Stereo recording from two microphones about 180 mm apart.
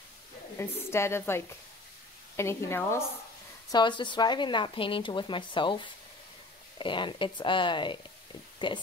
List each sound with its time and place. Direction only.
0.6 s a woman's voice: 15° left (ahead or behind)
3.7 s a woman's voice: 25° left (ahead or behind)